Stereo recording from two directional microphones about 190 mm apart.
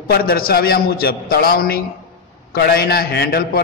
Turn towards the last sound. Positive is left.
turn(degrees=55)  # may be behind; listen again after turning